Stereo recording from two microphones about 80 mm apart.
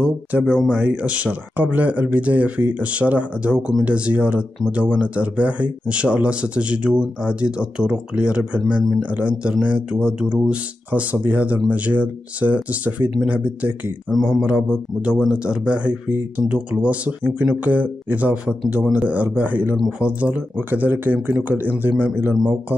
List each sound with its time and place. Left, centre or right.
0.0 s speech: centre
14.1 s speech: centre
14.4 s speech: centre